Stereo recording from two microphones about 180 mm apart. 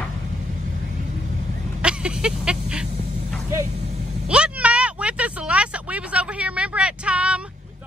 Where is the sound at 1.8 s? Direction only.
5° right (ahead or behind).